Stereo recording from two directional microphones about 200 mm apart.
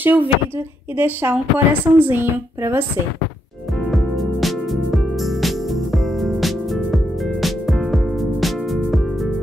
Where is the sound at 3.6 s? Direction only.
Centre (ahead or behind).